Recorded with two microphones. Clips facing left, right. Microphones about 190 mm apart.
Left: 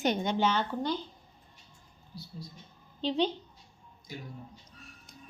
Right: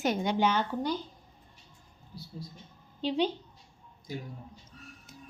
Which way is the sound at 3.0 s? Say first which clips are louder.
Even; 10° right (ahead or behind).